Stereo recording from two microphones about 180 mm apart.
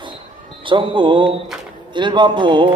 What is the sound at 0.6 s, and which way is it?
Speech, 25° right (ahead or behind).